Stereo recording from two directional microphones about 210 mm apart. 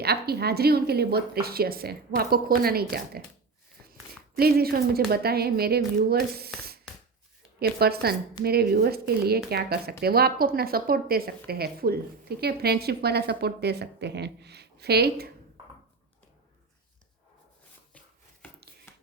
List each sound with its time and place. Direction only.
0.0 s speech: 50° right (ahead or behind)
4.4 s speech: 45° right (ahead or behind)
18.9 s shuffle: 10° left (ahead or behind)